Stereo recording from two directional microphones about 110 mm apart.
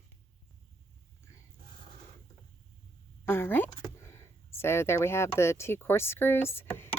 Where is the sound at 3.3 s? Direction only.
20° left (ahead or behind).